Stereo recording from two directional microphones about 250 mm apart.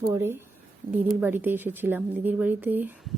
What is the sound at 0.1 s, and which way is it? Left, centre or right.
Speech, centre.